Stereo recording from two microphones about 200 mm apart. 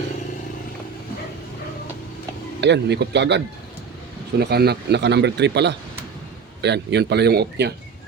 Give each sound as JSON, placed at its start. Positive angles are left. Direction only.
{"t": 2.6, "sound": "speech", "side_deg": -60}